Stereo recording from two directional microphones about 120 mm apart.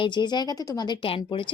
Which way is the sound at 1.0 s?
50° left (ahead or behind).